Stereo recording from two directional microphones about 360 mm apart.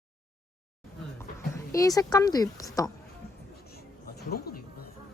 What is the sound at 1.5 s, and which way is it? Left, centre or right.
Speech, centre.